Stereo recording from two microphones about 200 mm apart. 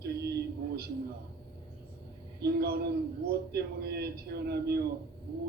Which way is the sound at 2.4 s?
50° right (ahead or behind).